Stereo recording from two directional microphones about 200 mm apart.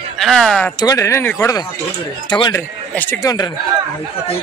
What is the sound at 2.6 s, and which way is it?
Speech, 10° left (ahead or behind).